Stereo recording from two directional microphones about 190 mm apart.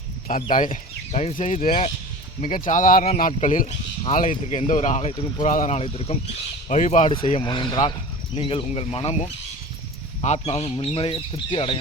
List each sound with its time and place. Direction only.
0.3 s speech: 45° left (ahead or behind)
7.4 s speech: 25° left (ahead or behind)
10.2 s speech: 35° left (ahead or behind)